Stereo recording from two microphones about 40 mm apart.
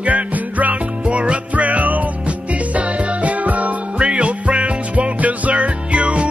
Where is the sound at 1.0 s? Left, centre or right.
Right.